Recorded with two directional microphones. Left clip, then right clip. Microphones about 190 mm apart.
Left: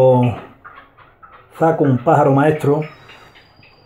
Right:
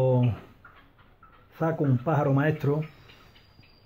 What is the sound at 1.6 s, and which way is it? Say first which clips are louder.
Speech: left 13 dB; 30° right (ahead or behind).